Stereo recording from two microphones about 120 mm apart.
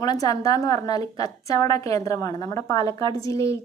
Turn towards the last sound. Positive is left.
turn(degrees=25)  # may be behind; listen again after turning